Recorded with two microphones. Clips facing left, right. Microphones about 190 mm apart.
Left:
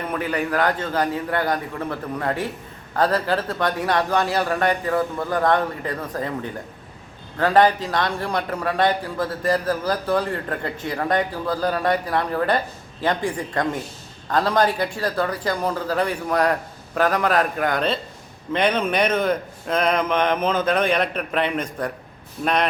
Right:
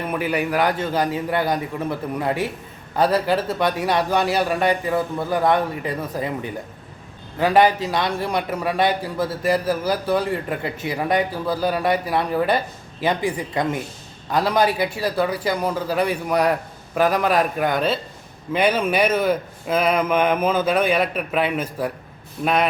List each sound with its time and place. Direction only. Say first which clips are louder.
0.1 s a man's voice: right 2 dB; 10° right (ahead or behind)